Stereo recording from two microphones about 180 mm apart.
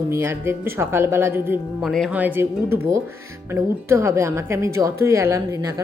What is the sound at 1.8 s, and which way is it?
Speech, centre (ahead or behind).